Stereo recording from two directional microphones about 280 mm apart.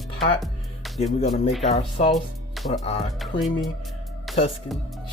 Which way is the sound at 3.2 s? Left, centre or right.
Centre.